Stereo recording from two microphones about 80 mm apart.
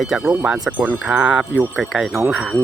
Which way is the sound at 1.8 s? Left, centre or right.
Centre.